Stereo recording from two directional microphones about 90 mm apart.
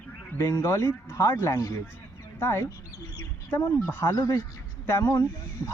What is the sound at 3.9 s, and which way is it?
Speech, 30° left (ahead or behind).